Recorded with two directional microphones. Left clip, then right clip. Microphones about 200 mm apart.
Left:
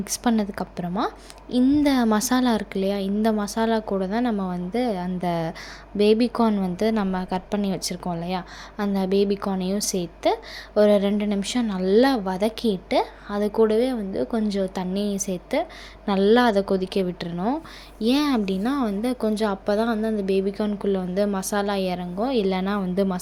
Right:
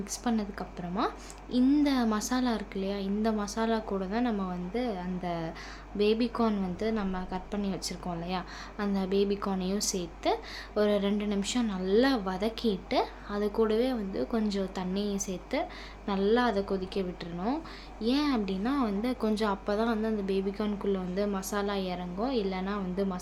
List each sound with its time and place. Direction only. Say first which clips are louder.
0.0 s a woman's voice: left 8 dB; 35° left (ahead or behind)